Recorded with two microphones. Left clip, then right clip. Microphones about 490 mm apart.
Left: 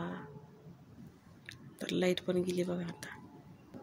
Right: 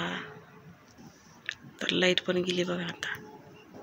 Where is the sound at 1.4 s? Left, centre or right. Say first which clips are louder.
Right 11 dB; left.